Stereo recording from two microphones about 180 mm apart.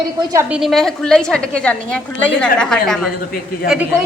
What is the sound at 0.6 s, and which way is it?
A man's voice, centre (ahead or behind).